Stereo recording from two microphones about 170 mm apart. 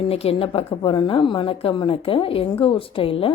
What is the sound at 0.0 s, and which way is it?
Speech, 35° left (ahead or behind).